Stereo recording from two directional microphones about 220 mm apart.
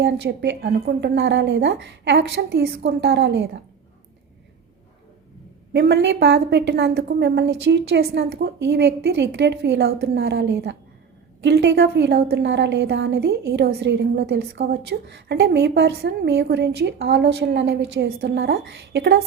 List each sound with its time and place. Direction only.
0.0 s a woman's voice: 50° right (ahead or behind)
5.7 s a woman's voice: 50° right (ahead or behind)